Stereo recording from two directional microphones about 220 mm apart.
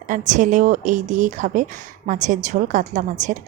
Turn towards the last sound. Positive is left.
turn(degrees=-35)  # may be behind; listen again after turning